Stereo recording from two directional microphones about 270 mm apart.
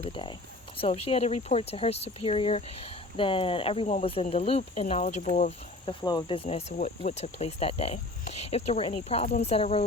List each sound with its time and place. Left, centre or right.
0.0 s speech: centre